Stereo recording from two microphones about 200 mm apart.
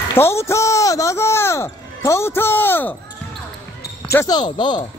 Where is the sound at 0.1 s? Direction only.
10° left (ahead or behind).